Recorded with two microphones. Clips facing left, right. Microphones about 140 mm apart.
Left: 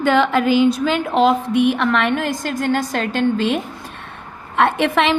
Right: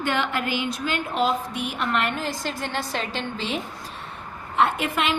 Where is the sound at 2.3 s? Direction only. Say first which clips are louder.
Left 9 dB; 50° left (ahead or behind).